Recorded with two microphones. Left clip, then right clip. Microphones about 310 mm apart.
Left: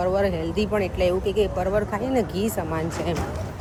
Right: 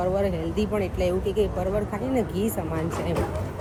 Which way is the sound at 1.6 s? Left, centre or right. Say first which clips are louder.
Left 3 dB; centre.